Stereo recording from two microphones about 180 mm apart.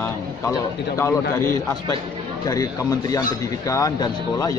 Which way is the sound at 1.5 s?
20° left (ahead or behind).